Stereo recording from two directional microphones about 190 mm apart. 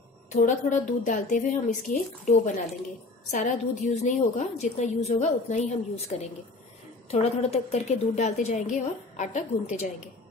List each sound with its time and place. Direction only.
0.3 s a woman's voice: 40° left (ahead or behind)